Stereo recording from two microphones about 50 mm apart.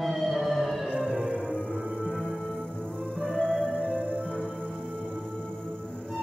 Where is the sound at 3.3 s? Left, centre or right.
Centre.